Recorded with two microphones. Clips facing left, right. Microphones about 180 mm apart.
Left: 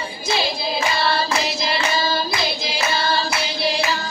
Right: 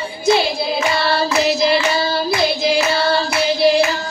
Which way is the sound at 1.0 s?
60° right (ahead or behind).